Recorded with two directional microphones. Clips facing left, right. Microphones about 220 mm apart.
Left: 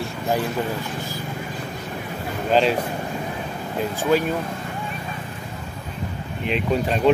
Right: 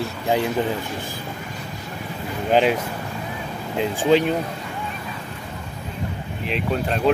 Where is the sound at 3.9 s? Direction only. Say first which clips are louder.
Right 3 dB; 30° right (ahead or behind).